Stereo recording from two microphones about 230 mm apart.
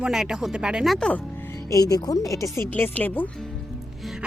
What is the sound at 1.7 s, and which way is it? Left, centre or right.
Speech, centre.